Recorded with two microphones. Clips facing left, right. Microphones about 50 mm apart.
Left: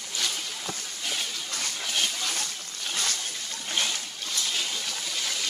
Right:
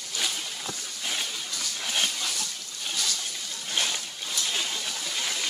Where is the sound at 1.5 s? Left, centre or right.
Left.